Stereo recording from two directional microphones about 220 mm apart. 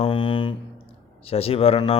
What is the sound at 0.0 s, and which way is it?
Music, 20° left (ahead or behind).